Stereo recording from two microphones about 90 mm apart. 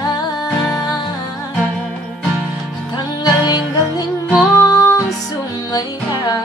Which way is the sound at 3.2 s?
45° left (ahead or behind).